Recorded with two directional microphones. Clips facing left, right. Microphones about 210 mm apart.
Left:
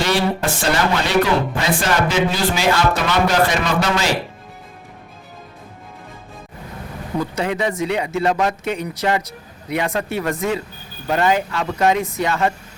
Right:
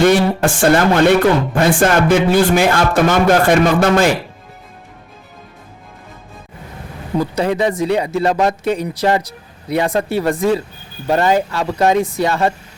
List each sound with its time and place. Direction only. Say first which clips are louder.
0.0 s a man's voice: right 7 dB; 50° right (ahead or behind)
7.2 s speech: right 5 dB; 35° right (ahead or behind)